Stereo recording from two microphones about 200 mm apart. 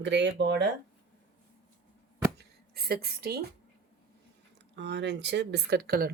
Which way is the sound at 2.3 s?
50° right (ahead or behind).